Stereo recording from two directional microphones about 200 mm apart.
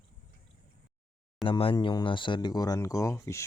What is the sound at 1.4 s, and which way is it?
Speech, 25° left (ahead or behind).